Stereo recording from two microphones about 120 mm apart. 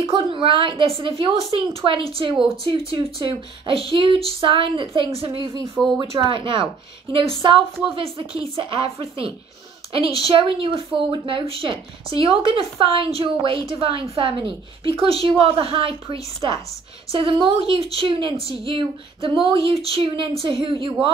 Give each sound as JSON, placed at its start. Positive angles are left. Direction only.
{"t": 0.0, "sound": "speech", "side_deg": -50}
{"t": 5.4, "sound": "speech", "side_deg": -30}
{"t": 5.9, "sound": "speech", "side_deg": -40}